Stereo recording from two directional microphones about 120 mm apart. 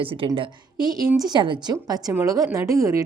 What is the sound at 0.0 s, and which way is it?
Speech, 50° right (ahead or behind).